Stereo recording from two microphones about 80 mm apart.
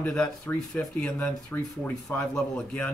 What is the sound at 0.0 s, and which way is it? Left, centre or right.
Speech, centre.